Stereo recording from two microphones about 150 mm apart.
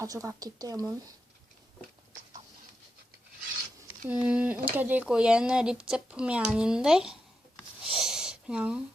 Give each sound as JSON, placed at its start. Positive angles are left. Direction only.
{"t": 0.0, "sound": "speech", "side_deg": -20}
{"t": 3.8, "sound": "speech", "side_deg": -10}
{"t": 7.9, "sound": "a sound", "side_deg": -5}